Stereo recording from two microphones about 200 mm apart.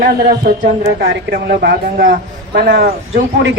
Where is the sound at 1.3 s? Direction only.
55° right (ahead or behind).